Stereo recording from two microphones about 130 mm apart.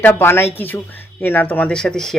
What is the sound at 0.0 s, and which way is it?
Speech, 15° left (ahead or behind).